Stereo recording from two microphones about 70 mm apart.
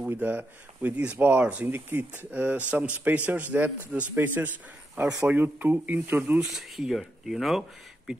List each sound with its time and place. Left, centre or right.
0.0 s speech: right
6.5 s speech: centre